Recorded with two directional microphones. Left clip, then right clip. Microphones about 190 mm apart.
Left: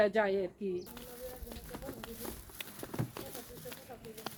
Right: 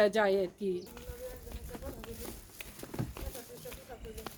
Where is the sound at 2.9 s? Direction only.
40° left (ahead or behind).